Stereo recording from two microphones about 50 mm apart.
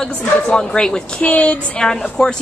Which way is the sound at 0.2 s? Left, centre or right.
Left.